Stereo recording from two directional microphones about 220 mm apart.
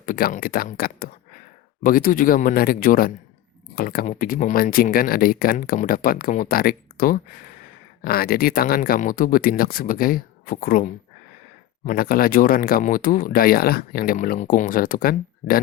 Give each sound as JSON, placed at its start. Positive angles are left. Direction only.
{"t": 0.0, "sound": "speech", "side_deg": 40}